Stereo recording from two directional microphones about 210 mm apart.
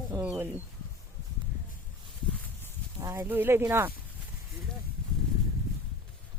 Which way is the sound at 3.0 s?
15° right (ahead or behind).